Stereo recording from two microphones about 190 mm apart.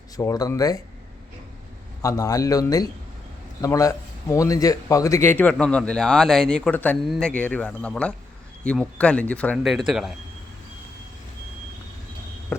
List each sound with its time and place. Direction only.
0.2 s speech: 20° left (ahead or behind)
2.0 s speech: 15° left (ahead or behind); by 10.2 s centre (ahead or behind)